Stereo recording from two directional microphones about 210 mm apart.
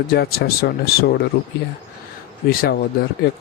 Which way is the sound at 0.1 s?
45° left (ahead or behind).